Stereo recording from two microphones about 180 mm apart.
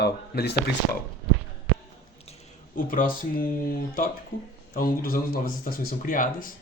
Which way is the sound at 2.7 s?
50° left (ahead or behind).